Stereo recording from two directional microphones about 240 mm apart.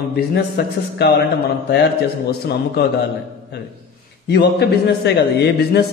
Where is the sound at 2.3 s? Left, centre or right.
Left.